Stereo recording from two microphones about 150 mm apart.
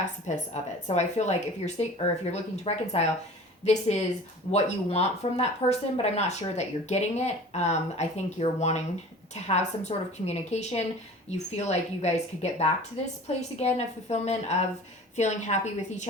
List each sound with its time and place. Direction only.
0.3 s speech: 50° left (ahead or behind)